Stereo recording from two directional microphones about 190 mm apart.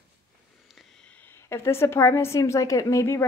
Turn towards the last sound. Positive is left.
turn(degrees=15)  # may be behind; listen again after turning